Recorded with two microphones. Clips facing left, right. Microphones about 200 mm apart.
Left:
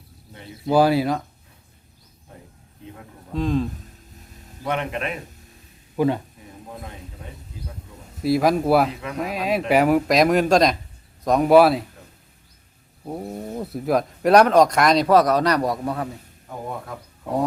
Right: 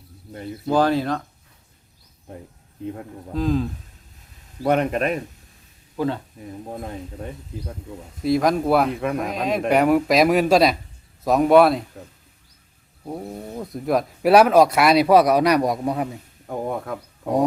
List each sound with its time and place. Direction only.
0.7 s speech: 10° left (ahead or behind)
3.3 s speech: centre (ahead or behind)
4.6 s speech: 40° right (ahead or behind)
6.0 s speech: 15° left (ahead or behind)
8.2 s speech: 5° left (ahead or behind)
8.9 s speech: 55° right (ahead or behind)
9.3 s speech: 5° left (ahead or behind)
13.1 s speech: 5° left (ahead or behind); by 16.0 s 15° right (ahead or behind)
16.5 s a sound: 55° right (ahead or behind)